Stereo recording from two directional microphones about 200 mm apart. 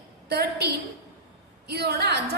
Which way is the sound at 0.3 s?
55° right (ahead or behind).